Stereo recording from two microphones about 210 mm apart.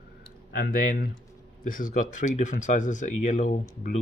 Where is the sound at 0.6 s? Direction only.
45° left (ahead or behind).